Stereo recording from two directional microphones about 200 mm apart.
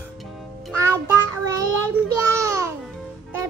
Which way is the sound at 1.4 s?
15° right (ahead or behind).